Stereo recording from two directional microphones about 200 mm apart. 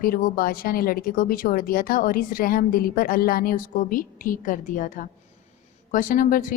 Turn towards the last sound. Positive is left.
turn(degrees=45)  # may be behind; listen again after turning